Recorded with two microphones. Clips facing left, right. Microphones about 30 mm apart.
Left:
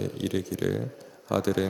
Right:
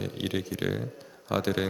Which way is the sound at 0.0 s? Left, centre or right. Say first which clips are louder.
Left 2 dB; right.